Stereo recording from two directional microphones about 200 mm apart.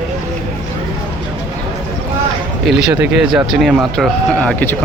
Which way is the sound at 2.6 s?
5° right (ahead or behind).